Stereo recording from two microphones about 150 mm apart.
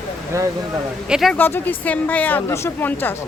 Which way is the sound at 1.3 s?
10° left (ahead or behind).